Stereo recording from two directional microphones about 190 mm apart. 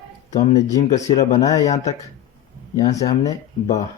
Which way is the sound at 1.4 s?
20° left (ahead or behind).